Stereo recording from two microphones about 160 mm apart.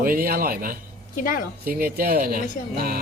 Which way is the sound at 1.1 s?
60° left (ahead or behind).